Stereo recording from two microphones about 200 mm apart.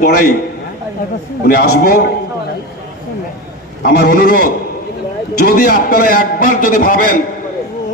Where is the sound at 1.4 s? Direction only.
50° left (ahead or behind).